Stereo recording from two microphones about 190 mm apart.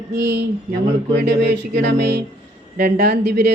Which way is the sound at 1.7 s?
60° right (ahead or behind).